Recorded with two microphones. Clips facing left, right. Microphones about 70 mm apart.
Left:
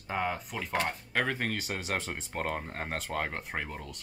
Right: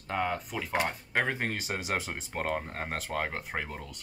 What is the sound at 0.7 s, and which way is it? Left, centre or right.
Speech, centre.